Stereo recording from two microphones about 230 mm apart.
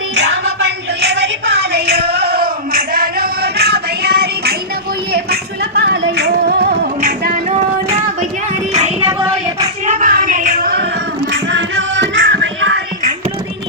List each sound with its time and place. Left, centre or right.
0.2 s a sound: right
5.1 s music: right
8.7 s child singing: right
11.3 s music: right